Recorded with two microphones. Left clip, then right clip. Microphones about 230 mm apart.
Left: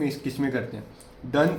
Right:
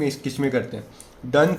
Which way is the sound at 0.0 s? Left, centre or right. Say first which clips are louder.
Right 4 dB; right.